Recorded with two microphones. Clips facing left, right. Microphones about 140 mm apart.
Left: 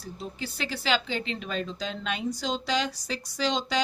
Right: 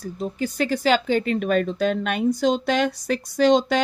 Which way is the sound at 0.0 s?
45° right (ahead or behind).